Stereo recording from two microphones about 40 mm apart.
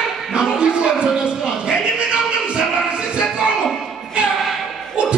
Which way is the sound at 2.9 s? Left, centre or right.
Right.